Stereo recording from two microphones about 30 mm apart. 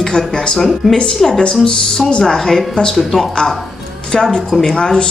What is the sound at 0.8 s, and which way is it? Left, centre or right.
Speech, centre.